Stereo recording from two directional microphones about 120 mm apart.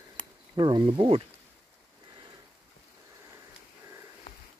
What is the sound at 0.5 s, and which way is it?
Speech, 40° right (ahead or behind).